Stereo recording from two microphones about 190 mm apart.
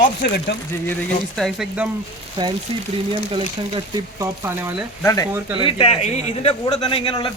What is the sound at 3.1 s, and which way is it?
Speech, 25° right (ahead or behind).